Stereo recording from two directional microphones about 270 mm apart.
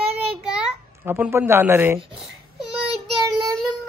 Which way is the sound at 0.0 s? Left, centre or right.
Right.